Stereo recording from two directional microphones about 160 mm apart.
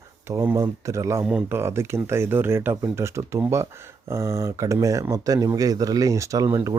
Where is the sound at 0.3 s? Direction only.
15° right (ahead or behind).